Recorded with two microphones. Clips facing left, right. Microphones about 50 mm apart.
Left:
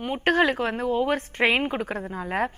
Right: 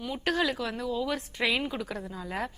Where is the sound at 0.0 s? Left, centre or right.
Left.